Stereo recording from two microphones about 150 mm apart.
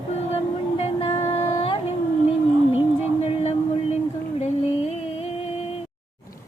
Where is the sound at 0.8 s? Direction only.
40° left (ahead or behind).